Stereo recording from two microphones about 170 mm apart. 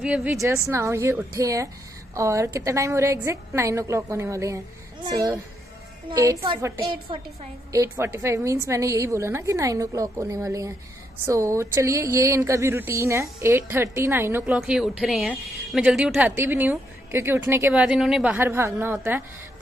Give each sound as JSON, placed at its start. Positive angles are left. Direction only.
{"t": 0.0, "sound": "speech", "side_deg": -5}
{"t": 0.7, "sound": "speech", "side_deg": -15}
{"t": 6.0, "sound": "a woman's voice", "side_deg": -25}
{"t": 7.7, "sound": "speech", "side_deg": -15}